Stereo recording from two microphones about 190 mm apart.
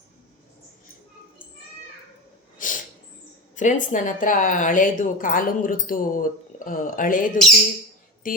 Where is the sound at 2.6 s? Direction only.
45° left (ahead or behind).